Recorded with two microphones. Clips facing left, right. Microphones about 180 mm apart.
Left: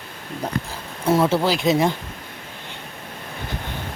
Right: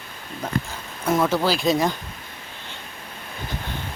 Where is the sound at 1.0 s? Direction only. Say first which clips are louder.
Left 2 dB; 30° left (ahead or behind).